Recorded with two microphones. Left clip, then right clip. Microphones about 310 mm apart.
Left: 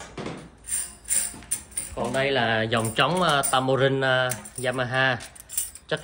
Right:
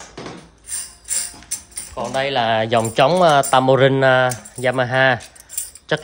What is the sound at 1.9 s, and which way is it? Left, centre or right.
Speech, centre.